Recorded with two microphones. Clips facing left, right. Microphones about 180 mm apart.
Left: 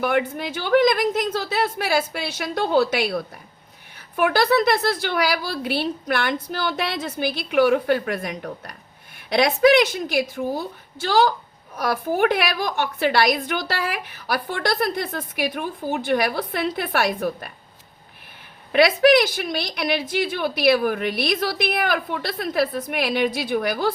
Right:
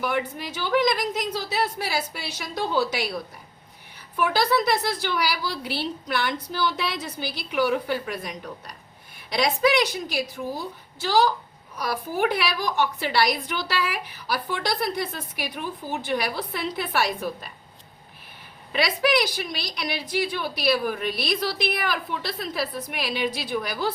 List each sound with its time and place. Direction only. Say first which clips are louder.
0.0 s a woman's voice: left 5 dB; 60° left (ahead or behind)
18.7 s a woman's voice: left 8 dB; 60° left (ahead or behind)